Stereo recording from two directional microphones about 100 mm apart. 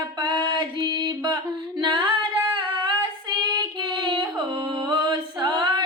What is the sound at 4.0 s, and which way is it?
Singing, 50° right (ahead or behind).